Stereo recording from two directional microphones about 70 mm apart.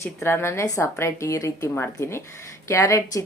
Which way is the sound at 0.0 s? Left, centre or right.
Left.